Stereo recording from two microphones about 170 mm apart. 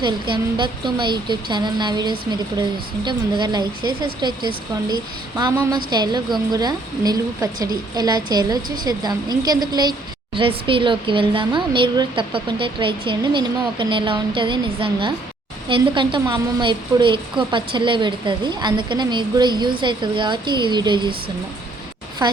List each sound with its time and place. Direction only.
0.0 s a woman's voice: 30° right (ahead or behind)